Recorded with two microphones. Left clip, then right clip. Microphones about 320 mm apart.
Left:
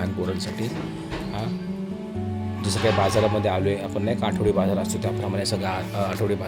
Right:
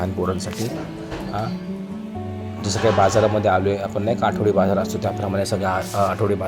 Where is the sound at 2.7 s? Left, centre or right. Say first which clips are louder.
Right 5 dB; centre.